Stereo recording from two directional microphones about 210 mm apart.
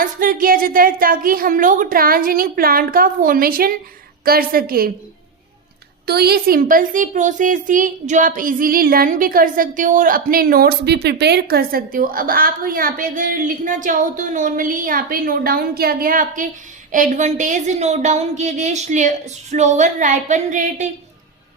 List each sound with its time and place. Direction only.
0.0 s a woman's voice: 40° right (ahead or behind)
6.1 s a woman's voice: 50° right (ahead or behind)